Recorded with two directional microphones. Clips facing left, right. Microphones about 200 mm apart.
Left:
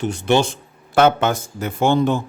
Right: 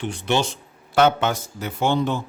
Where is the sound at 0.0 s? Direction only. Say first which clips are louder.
Left 5 dB; 45° left (ahead or behind).